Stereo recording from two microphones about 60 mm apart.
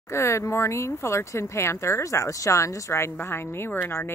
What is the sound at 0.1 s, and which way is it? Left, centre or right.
Speech, left.